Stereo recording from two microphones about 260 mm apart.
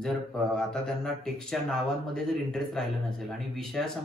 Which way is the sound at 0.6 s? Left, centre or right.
Centre.